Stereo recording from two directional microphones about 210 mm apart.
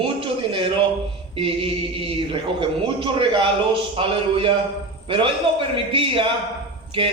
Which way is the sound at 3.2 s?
25° right (ahead or behind).